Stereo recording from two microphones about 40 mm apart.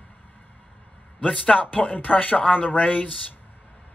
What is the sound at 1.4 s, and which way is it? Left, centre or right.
Speech, left.